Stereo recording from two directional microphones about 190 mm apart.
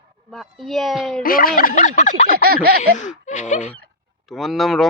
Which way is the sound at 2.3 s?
55° right (ahead or behind).